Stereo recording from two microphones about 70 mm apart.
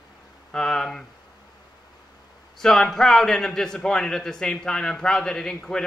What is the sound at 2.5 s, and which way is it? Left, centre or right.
A man's voice, centre.